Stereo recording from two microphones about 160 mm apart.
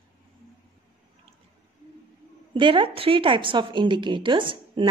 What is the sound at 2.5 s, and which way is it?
A woman's voice, 30° right (ahead or behind).